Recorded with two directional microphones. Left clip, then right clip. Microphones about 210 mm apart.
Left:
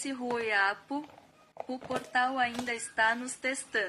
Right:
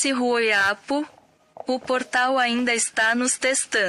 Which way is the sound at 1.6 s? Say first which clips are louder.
Right 10 dB; 20° right (ahead or behind).